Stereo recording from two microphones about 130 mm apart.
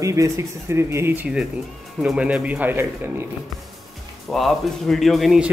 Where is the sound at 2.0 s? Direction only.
10° right (ahead or behind).